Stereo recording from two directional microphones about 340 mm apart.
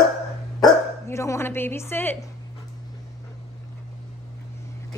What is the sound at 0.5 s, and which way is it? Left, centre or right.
Dog, centre.